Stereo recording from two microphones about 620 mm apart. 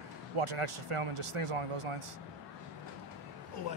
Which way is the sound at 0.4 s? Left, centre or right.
Right.